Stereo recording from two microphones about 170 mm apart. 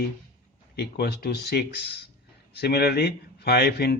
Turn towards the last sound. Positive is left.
turn(degrees=70)  # may be behind; listen again after turning